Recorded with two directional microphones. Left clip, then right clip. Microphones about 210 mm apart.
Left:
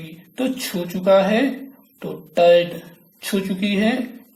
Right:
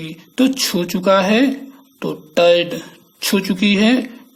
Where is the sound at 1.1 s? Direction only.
40° right (ahead or behind).